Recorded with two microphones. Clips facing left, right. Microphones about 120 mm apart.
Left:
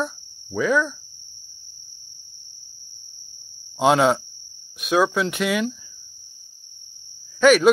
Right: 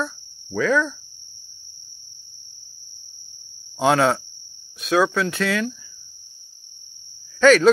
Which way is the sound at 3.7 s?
15° left (ahead or behind).